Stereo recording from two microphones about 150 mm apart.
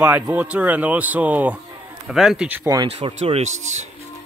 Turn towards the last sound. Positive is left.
turn(degrees=-45)  # may be behind; listen again after turning